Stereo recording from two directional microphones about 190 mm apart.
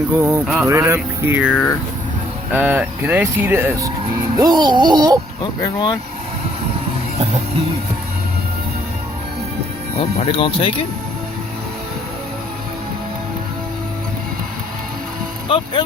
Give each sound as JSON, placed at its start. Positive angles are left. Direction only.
{"t": 0.1, "sound": "speech", "side_deg": -15}
{"t": 0.4, "sound": "speech", "side_deg": 0}
{"t": 0.7, "sound": "speech", "side_deg": -15}
{"t": 5.4, "sound": "speech", "side_deg": 25}
{"t": 10.0, "sound": "speech", "side_deg": 30}
{"t": 15.4, "sound": "speech", "side_deg": 25}